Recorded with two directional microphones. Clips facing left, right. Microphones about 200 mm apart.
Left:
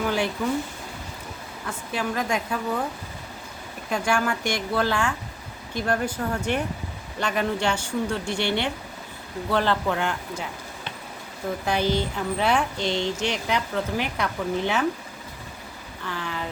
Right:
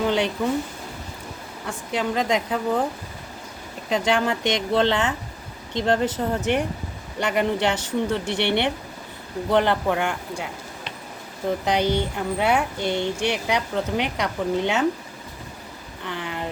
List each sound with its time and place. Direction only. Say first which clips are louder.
0.0 s speech: right 3 dB; 20° right (ahead or behind)
1.6 s speech: right 3 dB; 20° right (ahead or behind)
3.8 s speech: right 3 dB; 20° right (ahead or behind)
11.6 s speech: right 1 dB; 15° right (ahead or behind)
16.0 s speech: right 2 dB; 20° right (ahead or behind)